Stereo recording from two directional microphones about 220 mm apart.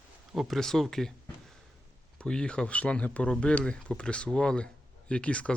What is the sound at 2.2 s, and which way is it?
Speech, 5° left (ahead or behind).